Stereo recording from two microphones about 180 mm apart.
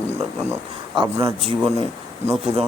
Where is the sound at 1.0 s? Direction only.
20° right (ahead or behind).